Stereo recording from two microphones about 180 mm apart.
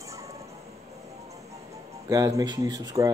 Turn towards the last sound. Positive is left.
turn(degrees=-20)  # may be behind; listen again after turning